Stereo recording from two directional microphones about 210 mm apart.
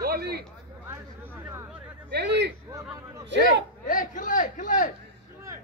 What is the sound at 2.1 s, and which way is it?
Speech, 55° right (ahead or behind).